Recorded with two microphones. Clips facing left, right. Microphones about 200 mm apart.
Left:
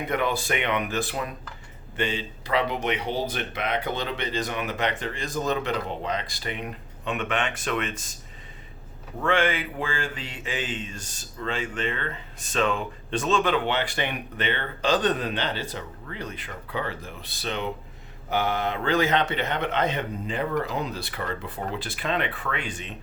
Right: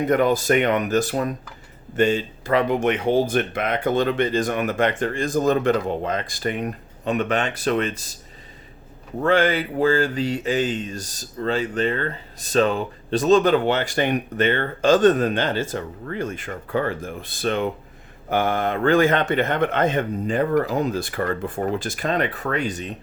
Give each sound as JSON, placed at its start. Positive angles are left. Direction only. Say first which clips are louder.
{"t": 0.1, "sound": "speech", "louder": "right 8 dB", "side_deg": -40}
{"t": 9.2, "sound": "speech", "louder": "right 5 dB", "side_deg": -40}